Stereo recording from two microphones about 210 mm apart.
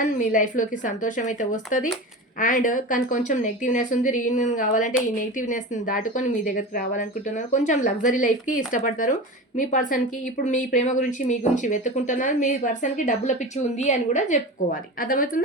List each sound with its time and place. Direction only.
0.0 s speech: 40° left (ahead or behind)